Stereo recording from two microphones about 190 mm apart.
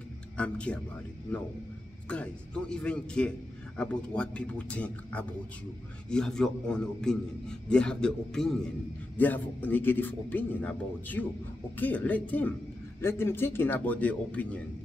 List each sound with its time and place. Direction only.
0.4 s a man's voice: 5° left (ahead or behind)
2.7 s a man's voice: 5° left (ahead or behind)